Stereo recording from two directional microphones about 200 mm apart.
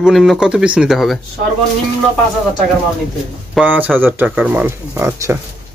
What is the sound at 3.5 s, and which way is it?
A man's voice, 10° right (ahead or behind).